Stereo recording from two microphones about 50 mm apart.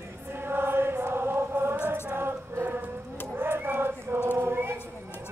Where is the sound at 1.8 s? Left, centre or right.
Right.